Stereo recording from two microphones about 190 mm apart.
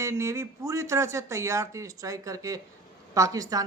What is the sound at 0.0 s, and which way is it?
Speech, 15° right (ahead or behind).